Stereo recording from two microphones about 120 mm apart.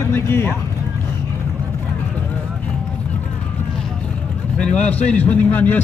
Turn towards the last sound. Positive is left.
turn(degrees=15)  # may be behind; listen again after turning